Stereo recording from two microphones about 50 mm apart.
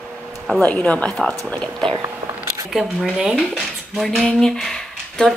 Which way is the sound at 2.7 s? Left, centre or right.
Centre.